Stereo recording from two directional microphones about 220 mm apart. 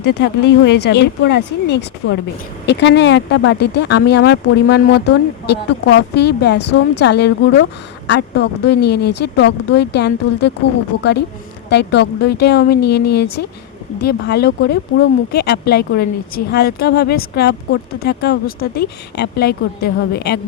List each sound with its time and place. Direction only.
0.0 s speech: 50° left (ahead or behind)
11.7 s speech: 50° left (ahead or behind)